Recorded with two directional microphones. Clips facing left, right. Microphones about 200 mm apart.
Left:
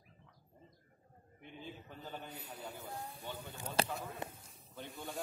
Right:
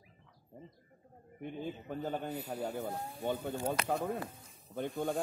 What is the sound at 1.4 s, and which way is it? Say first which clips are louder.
Speech: right 10 dB; 50° right (ahead or behind).